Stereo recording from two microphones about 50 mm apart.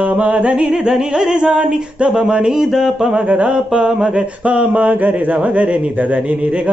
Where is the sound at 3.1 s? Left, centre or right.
Right.